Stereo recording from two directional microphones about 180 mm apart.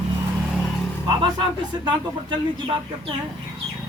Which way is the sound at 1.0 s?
25° right (ahead or behind).